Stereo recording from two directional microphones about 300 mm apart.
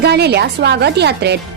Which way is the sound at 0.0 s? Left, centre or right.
Right.